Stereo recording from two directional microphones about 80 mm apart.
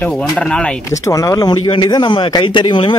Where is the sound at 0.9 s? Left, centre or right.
Left.